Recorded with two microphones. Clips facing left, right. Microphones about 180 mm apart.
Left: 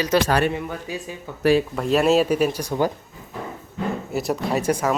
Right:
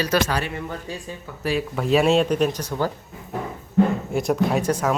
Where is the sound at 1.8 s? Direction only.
Centre (ahead or behind).